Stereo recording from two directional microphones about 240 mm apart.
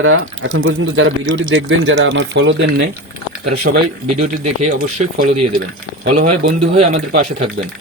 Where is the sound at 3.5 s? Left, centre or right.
Right.